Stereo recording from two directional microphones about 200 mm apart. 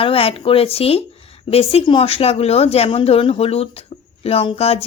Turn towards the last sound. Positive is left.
turn(degrees=30)  # may be behind; listen again after turning